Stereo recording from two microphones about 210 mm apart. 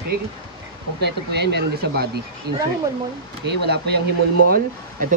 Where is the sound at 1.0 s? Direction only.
50° right (ahead or behind).